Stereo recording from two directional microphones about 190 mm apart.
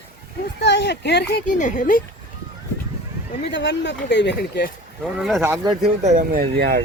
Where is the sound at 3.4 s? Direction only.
65° left (ahead or behind).